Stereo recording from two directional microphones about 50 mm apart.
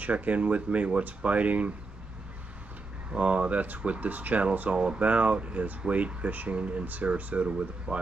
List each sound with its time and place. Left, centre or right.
0.0 s speech: right
3.1 s speech: right